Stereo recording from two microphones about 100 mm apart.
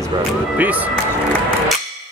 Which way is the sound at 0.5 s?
15° right (ahead or behind).